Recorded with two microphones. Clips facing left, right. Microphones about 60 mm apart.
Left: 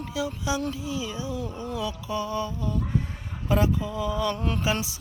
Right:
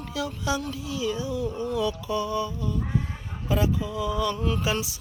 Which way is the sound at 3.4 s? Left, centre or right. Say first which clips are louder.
Left 1 dB; left.